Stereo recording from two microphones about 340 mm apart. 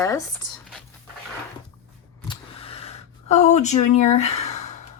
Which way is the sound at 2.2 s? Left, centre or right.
Centre.